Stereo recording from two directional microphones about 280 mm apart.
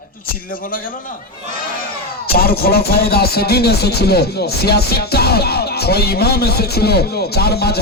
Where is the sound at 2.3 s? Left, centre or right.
Left.